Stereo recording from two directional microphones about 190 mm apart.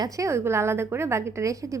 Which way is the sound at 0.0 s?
15° right (ahead or behind).